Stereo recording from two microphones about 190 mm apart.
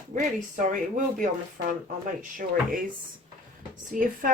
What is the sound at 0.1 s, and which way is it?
Speech, 45° right (ahead or behind).